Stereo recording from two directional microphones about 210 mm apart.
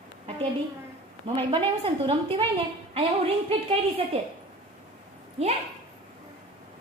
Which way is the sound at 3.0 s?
25° right (ahead or behind).